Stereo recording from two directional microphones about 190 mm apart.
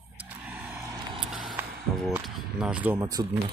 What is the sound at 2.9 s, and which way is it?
Speech, 20° right (ahead or behind).